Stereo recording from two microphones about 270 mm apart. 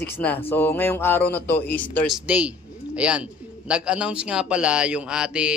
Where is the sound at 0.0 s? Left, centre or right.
Centre.